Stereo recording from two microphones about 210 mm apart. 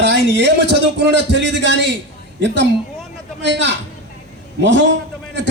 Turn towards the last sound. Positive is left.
turn(degrees=-60)  # may be behind; listen again after turning